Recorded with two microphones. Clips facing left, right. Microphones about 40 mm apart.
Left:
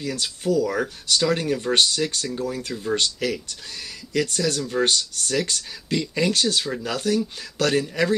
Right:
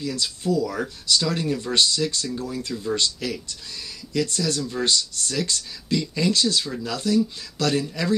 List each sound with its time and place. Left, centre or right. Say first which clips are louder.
0.0 s speech: even; left; by 3.0 s centre
3.0 s speech: left 2 dB; left